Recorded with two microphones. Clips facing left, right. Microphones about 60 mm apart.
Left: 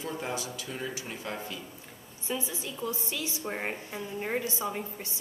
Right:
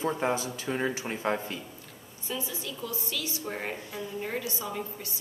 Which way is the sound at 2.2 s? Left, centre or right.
Left.